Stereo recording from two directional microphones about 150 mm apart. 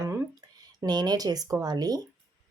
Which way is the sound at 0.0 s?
15° right (ahead or behind).